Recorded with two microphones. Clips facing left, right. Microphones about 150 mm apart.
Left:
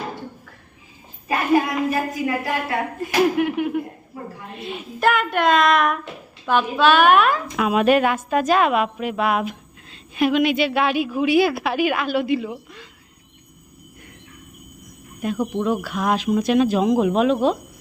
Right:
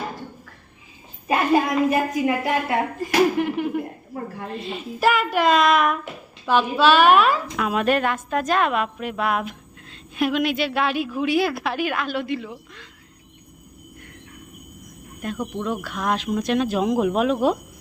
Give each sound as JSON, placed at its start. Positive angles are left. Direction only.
{"t": 1.3, "sound": "a woman's voice", "side_deg": -25}
{"t": 3.0, "sound": "a woman's voice", "side_deg": 5}
{"t": 15.6, "sound": "a woman's voice", "side_deg": 5}